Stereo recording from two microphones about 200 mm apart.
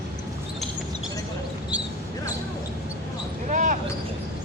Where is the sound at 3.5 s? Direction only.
40° right (ahead or behind).